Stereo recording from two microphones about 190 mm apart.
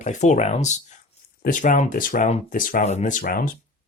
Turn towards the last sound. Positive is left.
turn(degrees=50)  # may be behind; listen again after turning